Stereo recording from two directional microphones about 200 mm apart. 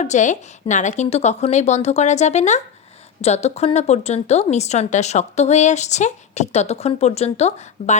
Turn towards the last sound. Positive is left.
turn(degrees=35)  # may be behind; listen again after turning